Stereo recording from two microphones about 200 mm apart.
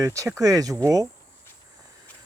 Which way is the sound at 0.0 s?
15° right (ahead or behind).